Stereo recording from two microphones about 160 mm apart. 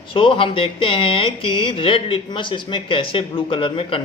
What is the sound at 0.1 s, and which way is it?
Speech, 30° left (ahead or behind).